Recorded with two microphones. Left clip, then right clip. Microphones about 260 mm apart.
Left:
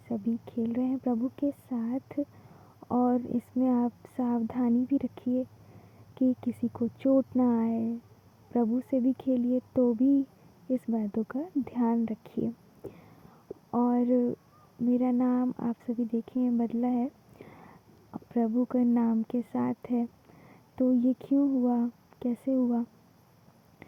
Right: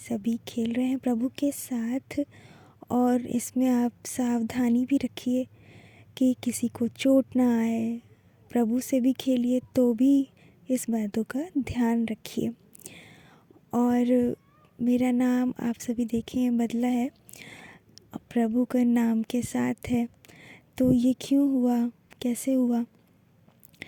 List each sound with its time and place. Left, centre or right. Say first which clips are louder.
0.1 s speech: right 2 dB; right